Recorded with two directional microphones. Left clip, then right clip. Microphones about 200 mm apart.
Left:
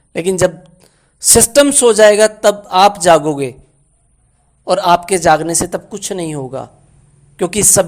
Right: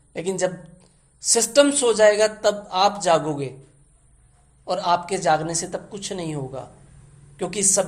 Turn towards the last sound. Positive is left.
turn(degrees=45)  # may be behind; listen again after turning